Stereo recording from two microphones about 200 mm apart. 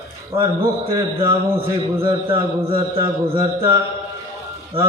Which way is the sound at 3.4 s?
15° right (ahead or behind).